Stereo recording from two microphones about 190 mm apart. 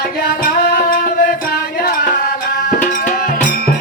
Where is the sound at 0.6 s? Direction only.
50° left (ahead or behind).